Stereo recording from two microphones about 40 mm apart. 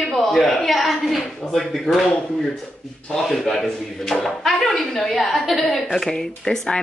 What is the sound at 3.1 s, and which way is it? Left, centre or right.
A woman's voice, centre.